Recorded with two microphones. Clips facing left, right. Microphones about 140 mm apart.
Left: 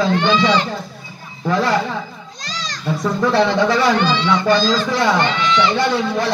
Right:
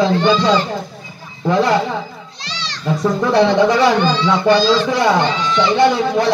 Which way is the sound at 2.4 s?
45° left (ahead or behind).